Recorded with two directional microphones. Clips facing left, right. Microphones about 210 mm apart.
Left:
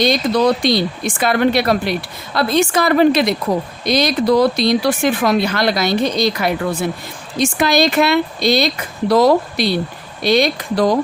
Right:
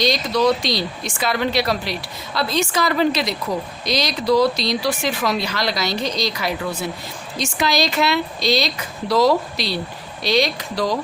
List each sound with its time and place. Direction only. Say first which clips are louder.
0.0 s speech: left 4 dB; 55° left (ahead or behind)